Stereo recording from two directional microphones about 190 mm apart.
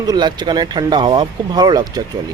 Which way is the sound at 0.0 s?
20° right (ahead or behind).